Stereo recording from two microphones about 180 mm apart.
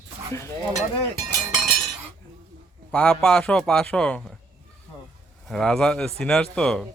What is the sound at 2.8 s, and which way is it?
A man's voice, 5° left (ahead or behind).